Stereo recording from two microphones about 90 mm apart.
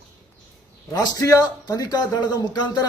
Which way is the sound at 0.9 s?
45° left (ahead or behind).